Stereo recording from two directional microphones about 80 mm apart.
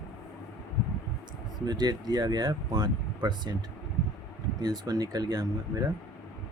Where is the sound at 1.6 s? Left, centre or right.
Right.